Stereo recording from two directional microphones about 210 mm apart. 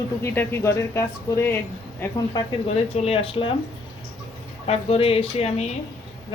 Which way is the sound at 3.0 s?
25° left (ahead or behind).